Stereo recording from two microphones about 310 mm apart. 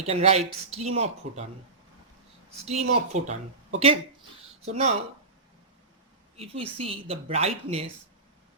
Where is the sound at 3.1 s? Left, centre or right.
Right.